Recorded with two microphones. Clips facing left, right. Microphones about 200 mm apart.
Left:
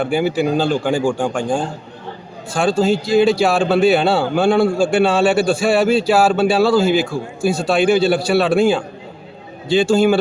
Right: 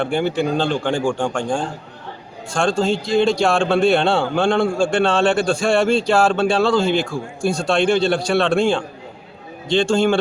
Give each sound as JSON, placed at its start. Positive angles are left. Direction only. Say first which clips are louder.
{"t": 0.0, "sound": "a man's voice", "louder": "left 2 dB", "side_deg": 5}